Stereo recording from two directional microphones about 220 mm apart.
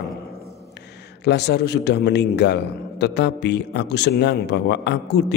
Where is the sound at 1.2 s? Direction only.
50° left (ahead or behind).